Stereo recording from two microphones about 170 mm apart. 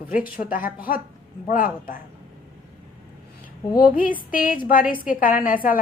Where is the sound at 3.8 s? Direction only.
55° left (ahead or behind).